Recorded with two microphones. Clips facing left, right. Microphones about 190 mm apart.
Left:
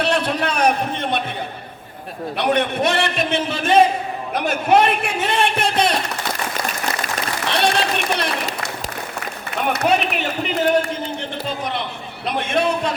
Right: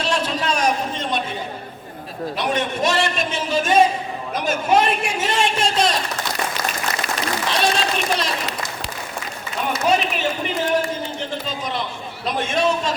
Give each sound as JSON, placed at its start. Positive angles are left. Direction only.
{"t": 0.0, "sound": "a sound", "side_deg": 60}
{"t": 2.4, "sound": "a man's voice", "side_deg": 60}
{"t": 7.0, "sound": "applause", "side_deg": 60}
{"t": 9.7, "sound": "speech", "side_deg": 65}
{"t": 11.4, "sound": "a sound", "side_deg": 60}
{"t": 12.2, "sound": "a man's voice", "side_deg": 60}